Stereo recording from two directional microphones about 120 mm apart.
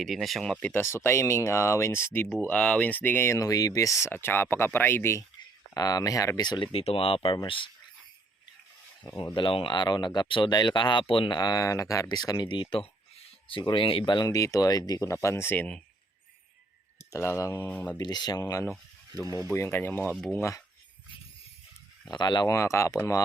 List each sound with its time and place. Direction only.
0.0 s speech: centre (ahead or behind); by 5.2 s 20° left (ahead or behind)
5.7 s speech: 30° left (ahead or behind)
9.1 s speech: 40° left (ahead or behind)
14.3 s speech: 25° left (ahead or behind)
17.1 s speech: 25° left (ahead or behind)
17.9 s speech: 35° left (ahead or behind); by 20.6 s 20° left (ahead or behind)
22.1 s speech: 40° left (ahead or behind)
22.4 s speech: 25° left (ahead or behind)